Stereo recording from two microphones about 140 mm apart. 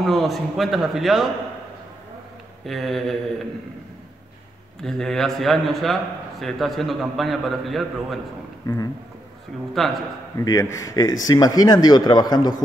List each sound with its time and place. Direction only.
0.0 s a man's voice: centre (ahead or behind)
2.6 s a man's voice: centre (ahead or behind)
4.8 s a man's voice: 5° left (ahead or behind)
9.8 s a man's voice: centre (ahead or behind)
10.4 s speech: 25° left (ahead or behind)